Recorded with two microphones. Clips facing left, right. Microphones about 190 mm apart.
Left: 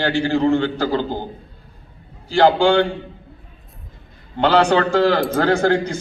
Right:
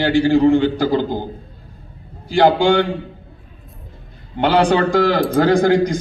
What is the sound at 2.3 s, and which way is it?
Speech, 15° right (ahead or behind).